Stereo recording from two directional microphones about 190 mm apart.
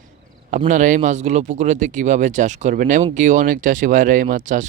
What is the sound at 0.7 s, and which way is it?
Speech, 40° right (ahead or behind).